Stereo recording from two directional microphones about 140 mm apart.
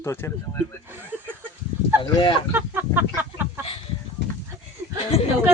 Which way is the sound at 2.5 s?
15° right (ahead or behind).